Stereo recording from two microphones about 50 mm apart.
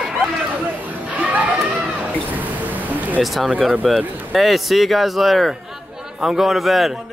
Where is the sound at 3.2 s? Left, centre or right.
Centre.